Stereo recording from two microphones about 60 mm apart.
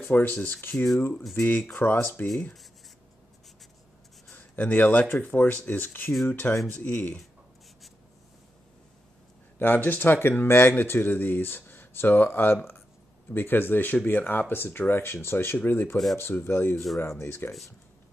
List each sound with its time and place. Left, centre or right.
0.0 s speech: left
4.3 s speech: left
9.6 s speech: left
16.7 s speech: centre
17.2 s speech: left